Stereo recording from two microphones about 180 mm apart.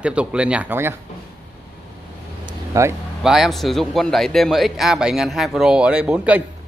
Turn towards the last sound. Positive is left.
turn(degrees=-5)  # may be behind; listen again after turning